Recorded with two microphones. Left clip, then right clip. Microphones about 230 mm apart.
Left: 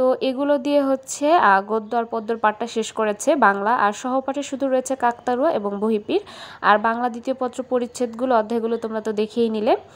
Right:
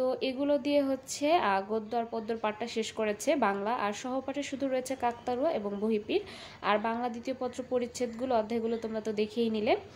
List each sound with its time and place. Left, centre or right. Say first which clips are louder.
0.0 s a woman's voice: left 11 dB; left